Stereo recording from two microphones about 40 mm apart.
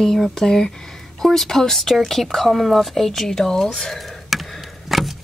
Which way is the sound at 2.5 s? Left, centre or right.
Centre.